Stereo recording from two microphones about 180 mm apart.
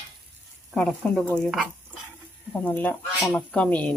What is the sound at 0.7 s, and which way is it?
Speech, 5° left (ahead or behind).